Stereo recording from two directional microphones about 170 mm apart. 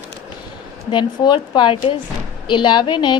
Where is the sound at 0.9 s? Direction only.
25° left (ahead or behind).